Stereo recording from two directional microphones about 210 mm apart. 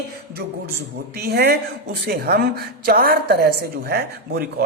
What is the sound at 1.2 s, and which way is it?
A woman's voice, 50° right (ahead or behind).